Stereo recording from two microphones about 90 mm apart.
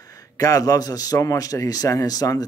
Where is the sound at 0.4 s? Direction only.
40° left (ahead or behind).